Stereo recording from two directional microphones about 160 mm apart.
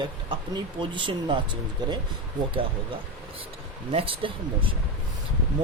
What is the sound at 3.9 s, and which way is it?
Speech, 35° right (ahead or behind).